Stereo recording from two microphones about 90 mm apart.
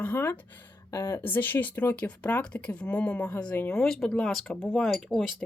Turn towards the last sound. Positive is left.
turn(degrees=5)  # may be behind; listen again after turning